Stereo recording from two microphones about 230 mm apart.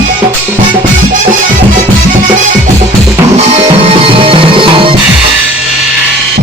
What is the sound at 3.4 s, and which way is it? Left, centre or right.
Music, right.